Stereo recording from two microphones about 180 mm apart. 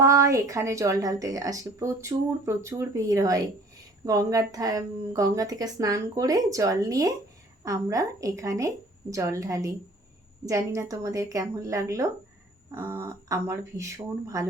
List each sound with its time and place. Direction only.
0.0 s a woman's voice: 15° right (ahead or behind)